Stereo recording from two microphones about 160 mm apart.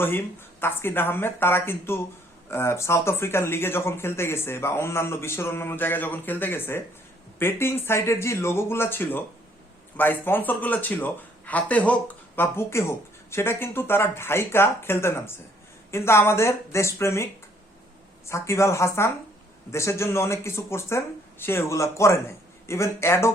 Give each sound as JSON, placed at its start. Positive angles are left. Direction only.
{"t": 0.6, "sound": "speech", "side_deg": 15}
{"t": 18.3, "sound": "speech", "side_deg": 15}